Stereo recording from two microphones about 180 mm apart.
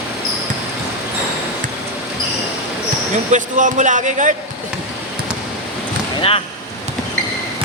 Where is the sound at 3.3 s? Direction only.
45° right (ahead or behind).